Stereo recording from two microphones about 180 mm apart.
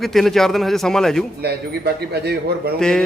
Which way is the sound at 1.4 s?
60° right (ahead or behind).